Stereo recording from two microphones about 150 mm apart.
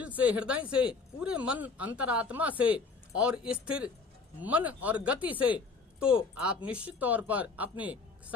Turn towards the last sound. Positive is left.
turn(degrees=-10)  # may be behind; listen again after turning